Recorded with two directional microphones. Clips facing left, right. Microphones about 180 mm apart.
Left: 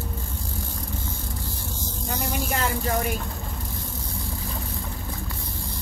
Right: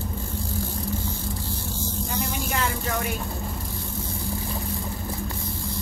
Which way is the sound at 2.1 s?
40° left (ahead or behind).